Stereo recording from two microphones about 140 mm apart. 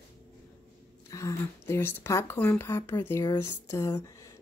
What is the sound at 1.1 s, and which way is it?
Speech, 20° left (ahead or behind).